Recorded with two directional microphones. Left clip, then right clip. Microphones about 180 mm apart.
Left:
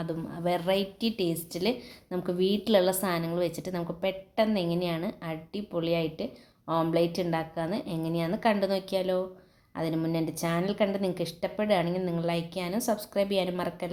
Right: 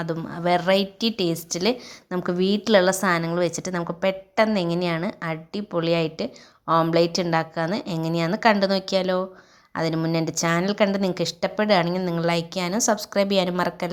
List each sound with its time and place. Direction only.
0.0 s a woman's voice: 15° right (ahead or behind)